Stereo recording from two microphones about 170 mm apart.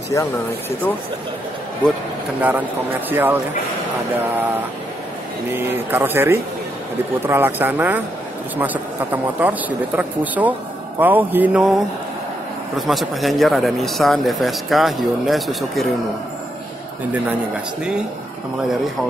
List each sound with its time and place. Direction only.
0.1 s speech: 15° left (ahead or behind)
3.1 s speech: 10° right (ahead or behind)
5.5 s speech: 10° right (ahead or behind)
12.7 s speech: centre (ahead or behind)